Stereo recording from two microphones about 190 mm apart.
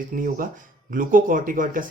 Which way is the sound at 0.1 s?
45° right (ahead or behind).